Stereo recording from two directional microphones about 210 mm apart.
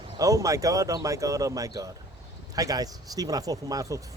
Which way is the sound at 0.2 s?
15° right (ahead or behind).